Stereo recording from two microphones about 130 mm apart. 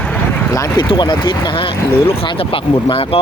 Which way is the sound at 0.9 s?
35° left (ahead or behind).